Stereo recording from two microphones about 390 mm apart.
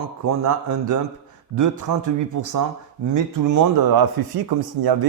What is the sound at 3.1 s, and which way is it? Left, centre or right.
A man's voice, right.